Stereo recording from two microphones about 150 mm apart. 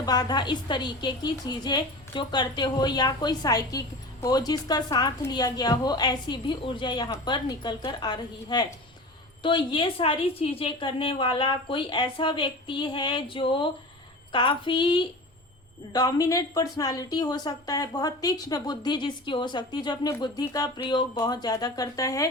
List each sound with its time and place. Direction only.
0.0 s a woman's voice: 25° left (ahead or behind)